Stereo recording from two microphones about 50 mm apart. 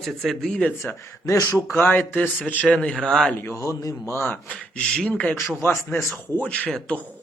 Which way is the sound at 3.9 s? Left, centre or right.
Left.